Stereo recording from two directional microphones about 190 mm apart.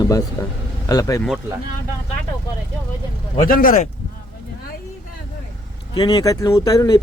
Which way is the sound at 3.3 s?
50° left (ahead or behind).